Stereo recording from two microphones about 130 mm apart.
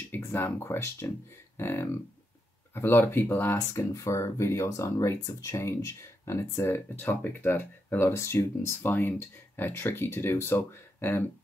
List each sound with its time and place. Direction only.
0.1 s speech: 15° left (ahead or behind)